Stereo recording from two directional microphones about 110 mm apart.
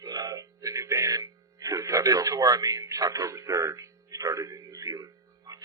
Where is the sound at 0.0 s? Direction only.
35° right (ahead or behind).